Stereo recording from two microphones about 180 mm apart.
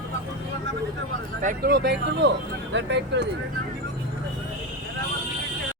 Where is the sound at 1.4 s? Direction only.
55° right (ahead or behind); by 3.2 s 70° right (ahead or behind).